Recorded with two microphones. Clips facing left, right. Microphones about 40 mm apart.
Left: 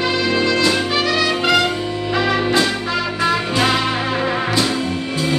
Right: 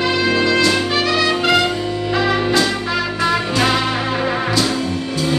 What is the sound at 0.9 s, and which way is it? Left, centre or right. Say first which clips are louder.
Trumpet: right 1 dB; centre.